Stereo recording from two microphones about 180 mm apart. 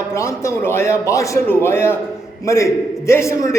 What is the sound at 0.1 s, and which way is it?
A man's voice, 15° left (ahead or behind).